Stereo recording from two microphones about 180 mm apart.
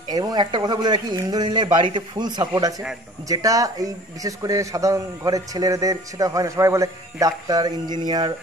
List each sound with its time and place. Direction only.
0.1 s a man's voice: 20° right (ahead or behind)